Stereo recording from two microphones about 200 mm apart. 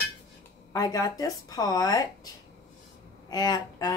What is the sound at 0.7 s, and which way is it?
A woman's voice, 20° left (ahead or behind).